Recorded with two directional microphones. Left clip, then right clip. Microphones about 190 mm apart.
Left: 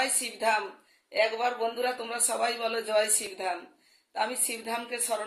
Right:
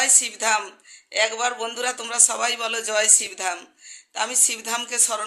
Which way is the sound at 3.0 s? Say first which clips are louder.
Right 7 dB; 10° right (ahead or behind).